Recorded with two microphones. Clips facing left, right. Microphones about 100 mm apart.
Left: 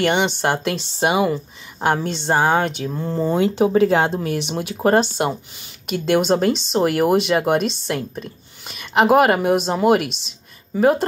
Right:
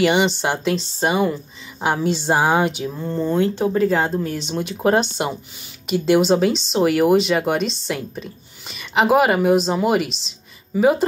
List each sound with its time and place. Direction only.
0.0 s speech: centre (ahead or behind)
2.9 s speech: 10° left (ahead or behind)
4.2 s a woman's voice: 65° left (ahead or behind)
4.5 s speech: 5° left (ahead or behind)
7.6 s a woman's voice: 55° left (ahead or behind)
7.9 s speech: centre (ahead or behind)
10.2 s a sound: centre (ahead or behind)